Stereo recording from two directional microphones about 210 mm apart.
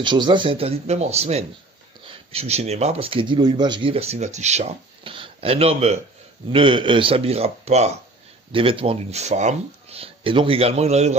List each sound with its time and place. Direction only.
0.0 s speech: 20° right (ahead or behind)